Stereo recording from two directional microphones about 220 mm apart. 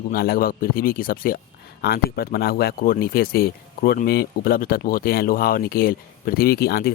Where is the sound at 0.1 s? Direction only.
45° left (ahead or behind).